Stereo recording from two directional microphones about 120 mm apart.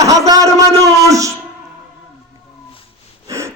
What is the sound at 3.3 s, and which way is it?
Wheeze, 25° right (ahead or behind).